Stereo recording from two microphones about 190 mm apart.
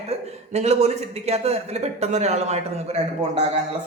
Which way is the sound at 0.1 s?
35° right (ahead or behind).